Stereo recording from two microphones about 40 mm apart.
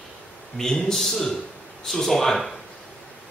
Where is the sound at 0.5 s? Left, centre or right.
Centre.